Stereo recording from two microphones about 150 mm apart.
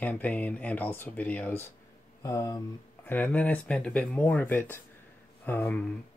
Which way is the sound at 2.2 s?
25° left (ahead or behind).